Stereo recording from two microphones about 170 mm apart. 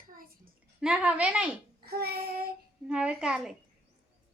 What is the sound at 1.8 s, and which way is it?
Child singing, 65° right (ahead or behind).